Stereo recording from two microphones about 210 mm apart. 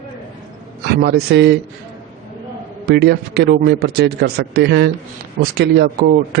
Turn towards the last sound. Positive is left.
turn(degrees=-50)  # may be behind; listen again after turning